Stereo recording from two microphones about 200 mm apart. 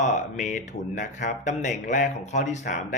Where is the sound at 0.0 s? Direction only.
35° left (ahead or behind).